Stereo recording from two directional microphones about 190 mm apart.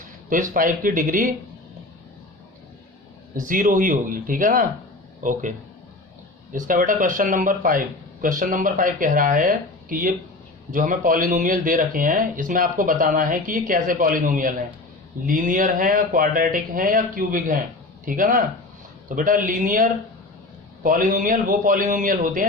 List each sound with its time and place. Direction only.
0.3 s speech: 45° right (ahead or behind)
3.3 s speech: 45° right (ahead or behind)